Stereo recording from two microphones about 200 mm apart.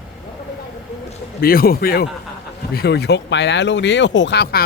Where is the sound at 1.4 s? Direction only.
50° left (ahead or behind).